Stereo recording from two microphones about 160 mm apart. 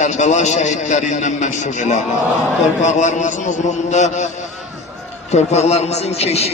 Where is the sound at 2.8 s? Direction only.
50° left (ahead or behind).